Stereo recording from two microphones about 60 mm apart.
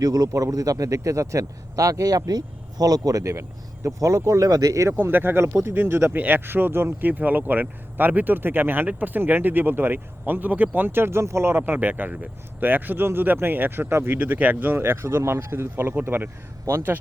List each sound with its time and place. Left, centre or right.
0.0 s a man's voice: right
4.9 s speech: right
14.2 s speech: right